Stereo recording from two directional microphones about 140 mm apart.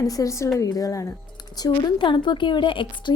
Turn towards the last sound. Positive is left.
turn(degrees=35)  # may be behind; listen again after turning